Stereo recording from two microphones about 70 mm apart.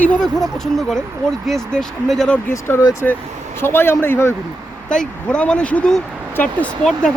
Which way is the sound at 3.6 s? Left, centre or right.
Left.